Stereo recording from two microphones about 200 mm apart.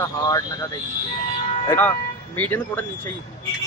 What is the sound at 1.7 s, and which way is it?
A man's voice, 10° left (ahead or behind).